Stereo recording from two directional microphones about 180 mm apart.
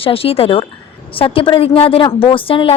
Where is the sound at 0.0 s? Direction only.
30° left (ahead or behind).